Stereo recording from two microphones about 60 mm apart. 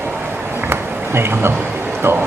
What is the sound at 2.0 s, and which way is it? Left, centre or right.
Speech, right.